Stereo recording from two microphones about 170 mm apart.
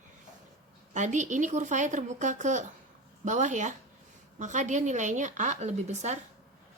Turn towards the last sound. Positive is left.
turn(degrees=-40)  # may be behind; listen again after turning